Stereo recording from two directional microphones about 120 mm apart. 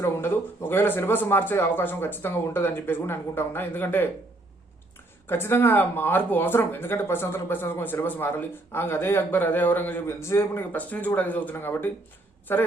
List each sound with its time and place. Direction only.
0.0 s speech: 20° left (ahead or behind)
5.2 s speech: 20° left (ahead or behind)